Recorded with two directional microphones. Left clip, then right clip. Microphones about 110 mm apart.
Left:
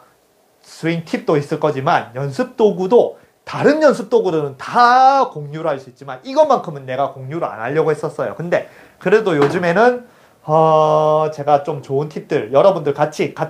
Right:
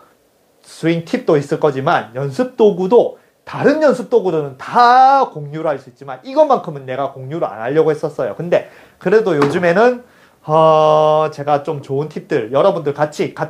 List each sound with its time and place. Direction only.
0.7 s speech: 20° left (ahead or behind)
3.4 s speech: 40° left (ahead or behind)
4.6 s speech: 30° left (ahead or behind)
10.4 s speech: centre (ahead or behind); by 13.5 s 25° left (ahead or behind)